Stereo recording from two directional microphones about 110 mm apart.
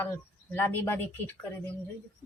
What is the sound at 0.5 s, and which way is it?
Speech, 20° left (ahead or behind).